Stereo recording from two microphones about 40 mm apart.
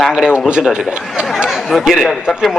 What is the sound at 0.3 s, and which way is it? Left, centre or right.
Speech, right.